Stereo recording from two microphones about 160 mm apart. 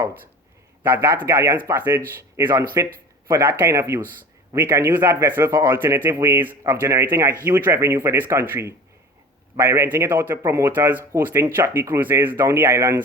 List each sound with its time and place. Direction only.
0.9 s speech: 15° right (ahead or behind)